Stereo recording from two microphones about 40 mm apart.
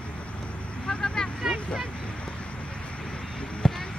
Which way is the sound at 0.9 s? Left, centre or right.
Centre.